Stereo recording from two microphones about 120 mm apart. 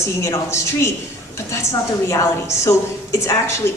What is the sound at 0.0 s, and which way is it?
Speech, 25° left (ahead or behind).